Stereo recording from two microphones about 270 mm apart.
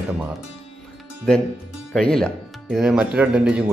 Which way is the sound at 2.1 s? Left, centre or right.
Centre.